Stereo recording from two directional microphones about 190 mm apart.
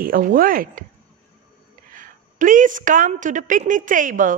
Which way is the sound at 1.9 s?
45° right (ahead or behind).